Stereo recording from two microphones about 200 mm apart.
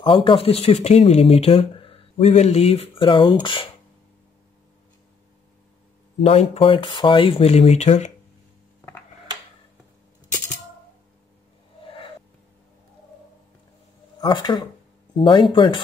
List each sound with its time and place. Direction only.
0.0 s speech: 25° left (ahead or behind)
6.2 s speech: 30° left (ahead or behind)
14.2 s speech: 25° left (ahead or behind)